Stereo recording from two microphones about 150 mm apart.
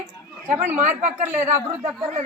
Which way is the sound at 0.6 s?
50° right (ahead or behind).